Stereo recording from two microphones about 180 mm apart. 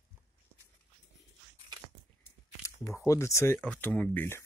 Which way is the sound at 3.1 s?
15° left (ahead or behind).